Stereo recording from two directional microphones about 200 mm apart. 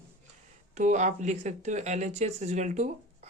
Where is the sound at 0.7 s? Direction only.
35° right (ahead or behind).